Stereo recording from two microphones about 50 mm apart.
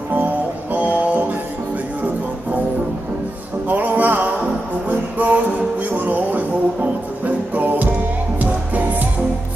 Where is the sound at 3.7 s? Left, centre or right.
Right.